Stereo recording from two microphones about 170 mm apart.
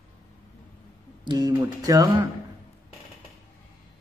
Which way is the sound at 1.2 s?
20° right (ahead or behind).